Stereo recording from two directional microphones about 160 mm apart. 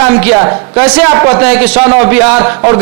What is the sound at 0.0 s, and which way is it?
A man's voice, 10° right (ahead or behind).